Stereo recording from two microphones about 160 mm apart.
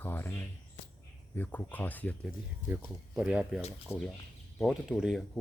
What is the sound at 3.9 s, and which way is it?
Speech, 5° left (ahead or behind).